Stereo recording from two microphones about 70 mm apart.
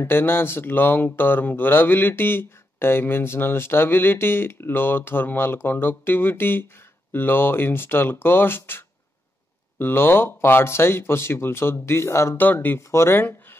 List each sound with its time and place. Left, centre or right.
0.0 s speech: left
12.4 s speech: left